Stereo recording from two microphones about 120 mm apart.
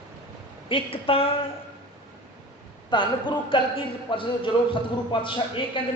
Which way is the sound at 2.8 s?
40° left (ahead or behind).